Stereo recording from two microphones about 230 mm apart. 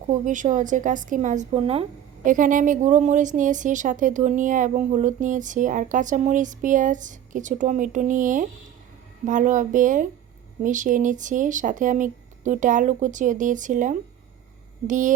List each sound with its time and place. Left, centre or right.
0.1 s a woman's voice: right